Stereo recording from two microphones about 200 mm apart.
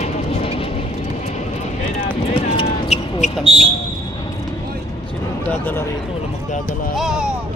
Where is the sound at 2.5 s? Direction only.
30° left (ahead or behind).